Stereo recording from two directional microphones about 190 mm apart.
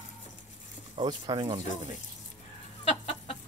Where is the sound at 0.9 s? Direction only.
20° right (ahead or behind).